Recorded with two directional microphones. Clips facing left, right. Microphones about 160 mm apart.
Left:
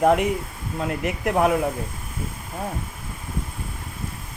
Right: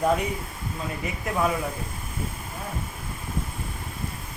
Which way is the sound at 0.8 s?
75° left (ahead or behind).